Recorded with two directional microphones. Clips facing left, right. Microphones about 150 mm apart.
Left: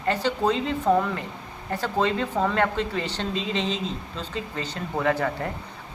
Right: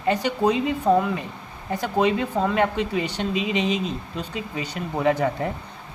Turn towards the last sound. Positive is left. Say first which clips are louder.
# right 3 dB
turn(degrees=-20)  # may be behind; listen again after turning